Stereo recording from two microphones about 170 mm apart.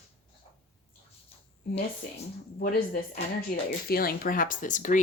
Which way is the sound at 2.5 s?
60° left (ahead or behind).